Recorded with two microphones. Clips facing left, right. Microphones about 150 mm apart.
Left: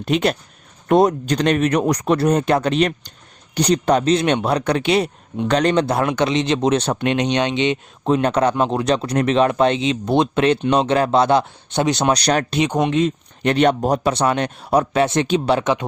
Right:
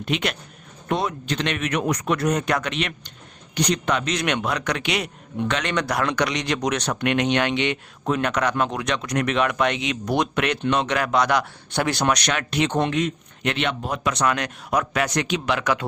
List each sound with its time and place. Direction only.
0.0 s speech: 35° left (ahead or behind)
0.9 s speech: 45° left (ahead or behind)
5.8 s speech: 25° left (ahead or behind)
12.1 s speech: 35° left (ahead or behind)
12.5 s speech: 15° left (ahead or behind)
12.9 s speech: 25° left (ahead or behind)